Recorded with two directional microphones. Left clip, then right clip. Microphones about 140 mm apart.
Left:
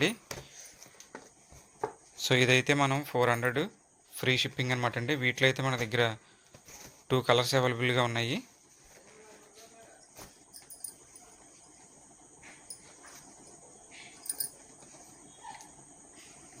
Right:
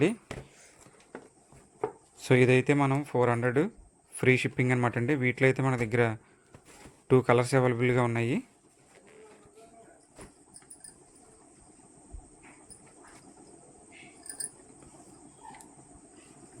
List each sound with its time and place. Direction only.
2.1 s speech: 40° right (ahead or behind)
4.2 s speech: 50° right (ahead or behind)